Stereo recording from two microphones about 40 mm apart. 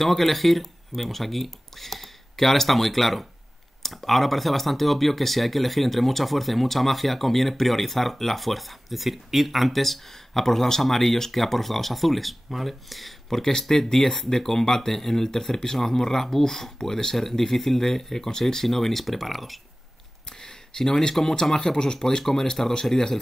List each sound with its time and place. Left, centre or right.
0.0 s speech: centre
13.4 s speech: centre
20.2 s speech: centre